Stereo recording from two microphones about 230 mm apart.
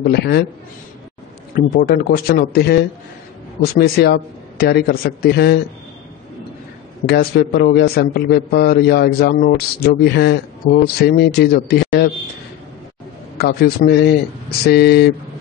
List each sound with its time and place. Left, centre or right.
0.0 s a man's voice: left
1.5 s a man's voice: left
7.1 s a man's voice: left
13.4 s a man's voice: left